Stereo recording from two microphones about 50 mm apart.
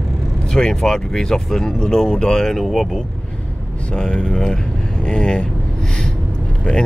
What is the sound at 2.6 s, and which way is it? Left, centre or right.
Speech, centre.